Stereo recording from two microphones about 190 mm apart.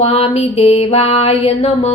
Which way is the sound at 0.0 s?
30° left (ahead or behind).